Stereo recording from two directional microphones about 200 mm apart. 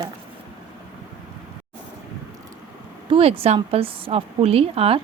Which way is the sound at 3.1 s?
30° right (ahead or behind).